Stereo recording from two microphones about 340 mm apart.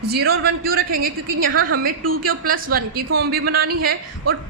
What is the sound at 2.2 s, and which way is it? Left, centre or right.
Speech, right.